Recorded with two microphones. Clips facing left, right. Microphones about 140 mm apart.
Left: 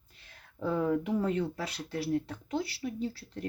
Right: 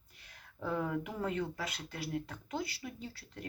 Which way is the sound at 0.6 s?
30° left (ahead or behind).